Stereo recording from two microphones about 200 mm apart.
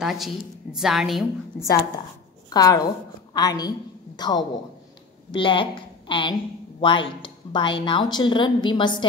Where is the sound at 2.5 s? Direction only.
20° left (ahead or behind).